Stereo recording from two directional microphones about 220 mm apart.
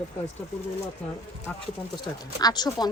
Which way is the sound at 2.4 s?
20° left (ahead or behind).